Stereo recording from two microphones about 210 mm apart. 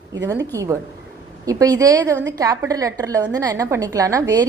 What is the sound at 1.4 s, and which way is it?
A woman's voice, 15° right (ahead or behind).